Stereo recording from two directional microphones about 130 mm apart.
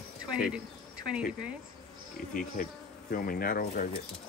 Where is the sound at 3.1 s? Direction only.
90° left.